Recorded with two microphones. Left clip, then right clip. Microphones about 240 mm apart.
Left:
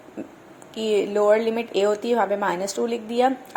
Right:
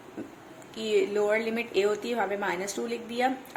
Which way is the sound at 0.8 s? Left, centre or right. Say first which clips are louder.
Left 5 dB; left.